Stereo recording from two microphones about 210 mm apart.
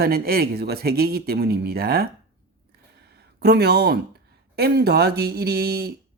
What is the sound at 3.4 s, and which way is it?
Speech, 50° right (ahead or behind).